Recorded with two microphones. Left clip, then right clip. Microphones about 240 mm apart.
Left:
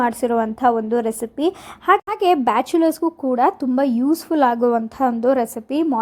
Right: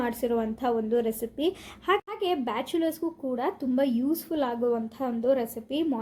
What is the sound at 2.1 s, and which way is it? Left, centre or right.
A woman's voice, left.